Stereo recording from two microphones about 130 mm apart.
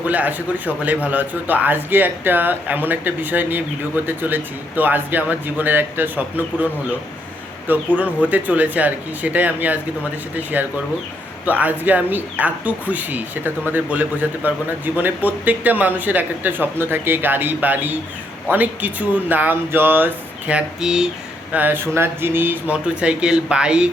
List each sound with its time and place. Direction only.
0.0 s speech: 10° right (ahead or behind)
7.7 s speech: 15° right (ahead or behind)
20.5 s a sound: 10° right (ahead or behind)
21.5 s speech: 15° right (ahead or behind)